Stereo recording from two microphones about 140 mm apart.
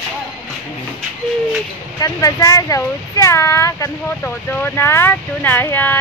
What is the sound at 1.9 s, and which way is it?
Speech, 25° left (ahead or behind).